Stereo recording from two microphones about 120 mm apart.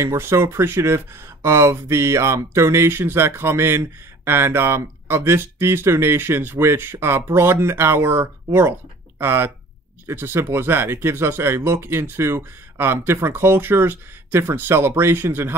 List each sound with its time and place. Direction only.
0.0 s speech: 20° right (ahead or behind)